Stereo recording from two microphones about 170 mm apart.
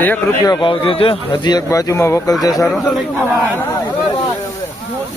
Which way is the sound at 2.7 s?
5° left (ahead or behind).